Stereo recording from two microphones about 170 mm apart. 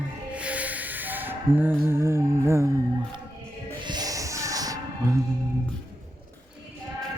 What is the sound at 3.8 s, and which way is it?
Music, 25° right (ahead or behind).